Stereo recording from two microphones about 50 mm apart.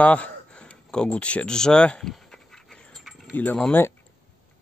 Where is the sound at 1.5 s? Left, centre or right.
Centre.